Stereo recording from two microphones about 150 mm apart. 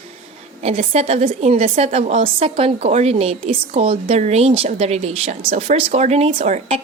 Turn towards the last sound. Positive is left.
turn(degrees=-50)  # may be behind; listen again after turning